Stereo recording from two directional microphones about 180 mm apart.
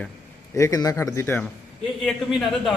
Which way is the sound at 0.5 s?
20° left (ahead or behind).